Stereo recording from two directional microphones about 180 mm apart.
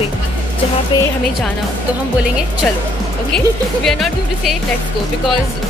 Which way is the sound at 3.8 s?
Centre (ahead or behind).